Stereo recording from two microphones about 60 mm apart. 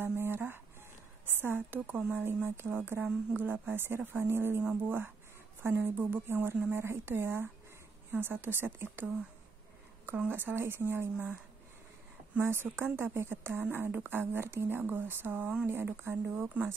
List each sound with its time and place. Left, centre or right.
0.0 s a sound: right
1.2 s a woman's voice: right
2.2 s a woman's voice: right
5.9 s speech: right
6.2 s a woman's voice: right
12.4 s a woman's voice: right